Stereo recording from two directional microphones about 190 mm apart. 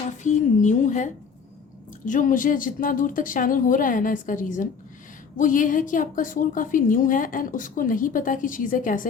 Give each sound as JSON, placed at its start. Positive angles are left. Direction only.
{"t": 0.2, "sound": "a woman's voice", "side_deg": 40}